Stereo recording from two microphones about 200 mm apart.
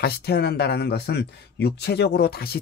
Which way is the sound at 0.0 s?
55° left (ahead or behind).